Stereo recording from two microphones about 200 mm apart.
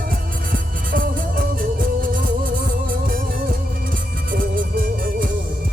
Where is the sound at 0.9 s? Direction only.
45° right (ahead or behind).